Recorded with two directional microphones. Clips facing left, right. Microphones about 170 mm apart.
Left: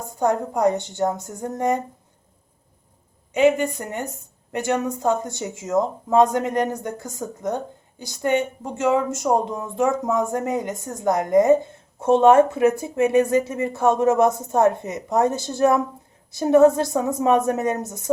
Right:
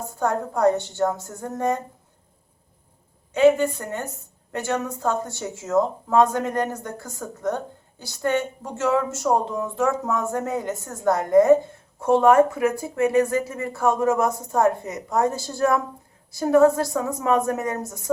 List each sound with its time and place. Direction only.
0.2 s speech: 15° left (ahead or behind)
3.3 s speech: 15° left (ahead or behind)